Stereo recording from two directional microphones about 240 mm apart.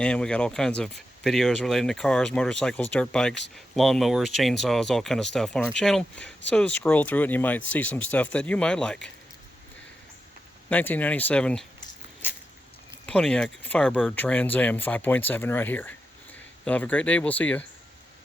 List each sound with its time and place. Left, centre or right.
0.0 s speech: centre
10.7 s speech: centre
12.9 s speech: centre